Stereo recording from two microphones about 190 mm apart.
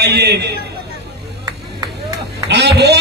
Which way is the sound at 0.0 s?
60° right (ahead or behind).